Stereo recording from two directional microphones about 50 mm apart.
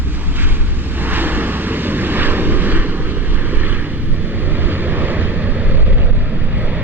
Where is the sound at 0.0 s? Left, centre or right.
Right.